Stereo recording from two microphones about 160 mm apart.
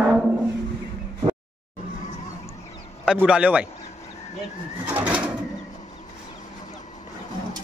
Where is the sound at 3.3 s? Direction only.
10° right (ahead or behind).